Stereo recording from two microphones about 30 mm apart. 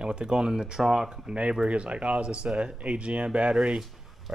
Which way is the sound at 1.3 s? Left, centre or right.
Right.